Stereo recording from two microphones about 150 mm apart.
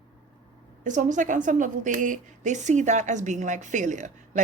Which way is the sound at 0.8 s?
55° right (ahead or behind).